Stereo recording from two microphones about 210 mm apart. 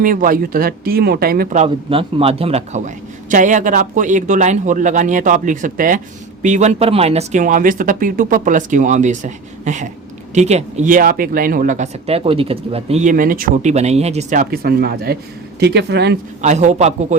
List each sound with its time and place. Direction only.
0.0 s speech: 40° right (ahead or behind)
16.4 s speech: 35° right (ahead or behind)